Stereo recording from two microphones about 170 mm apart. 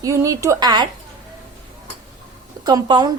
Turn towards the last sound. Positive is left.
turn(degrees=-25)  # may be behind; listen again after turning